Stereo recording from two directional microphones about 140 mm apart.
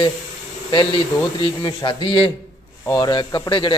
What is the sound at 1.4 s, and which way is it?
A man's voice, 35° left (ahead or behind).